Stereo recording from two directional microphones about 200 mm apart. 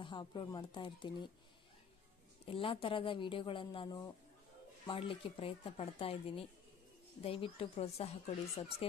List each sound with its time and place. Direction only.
0.0 s speech: 25° left (ahead or behind)
2.4 s speech: 25° left (ahead or behind)